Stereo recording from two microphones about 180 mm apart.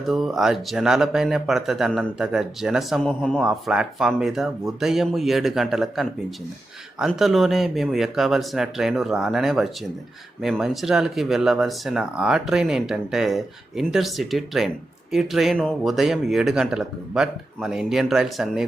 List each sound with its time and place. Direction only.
0.0 s speech: centre (ahead or behind)